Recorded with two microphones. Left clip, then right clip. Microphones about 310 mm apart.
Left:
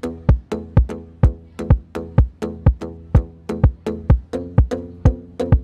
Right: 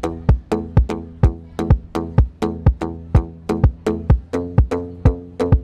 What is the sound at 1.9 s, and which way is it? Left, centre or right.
Music, right.